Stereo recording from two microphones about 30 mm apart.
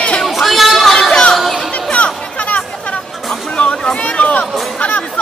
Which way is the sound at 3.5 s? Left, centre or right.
Left.